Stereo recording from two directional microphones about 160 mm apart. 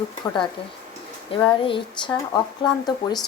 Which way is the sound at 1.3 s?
35° left (ahead or behind).